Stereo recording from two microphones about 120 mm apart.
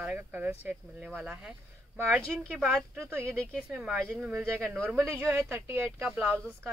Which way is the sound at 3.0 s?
20° right (ahead or behind).